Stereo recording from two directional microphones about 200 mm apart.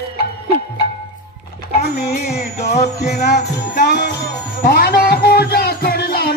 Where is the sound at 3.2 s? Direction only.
55° left (ahead or behind).